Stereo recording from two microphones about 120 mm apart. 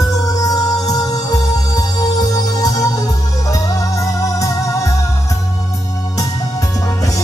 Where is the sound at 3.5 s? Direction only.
30° left (ahead or behind).